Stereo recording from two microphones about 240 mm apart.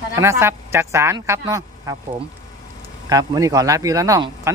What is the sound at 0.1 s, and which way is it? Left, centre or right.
Speech, centre.